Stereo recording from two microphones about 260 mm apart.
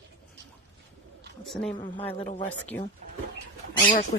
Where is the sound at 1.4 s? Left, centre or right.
Centre.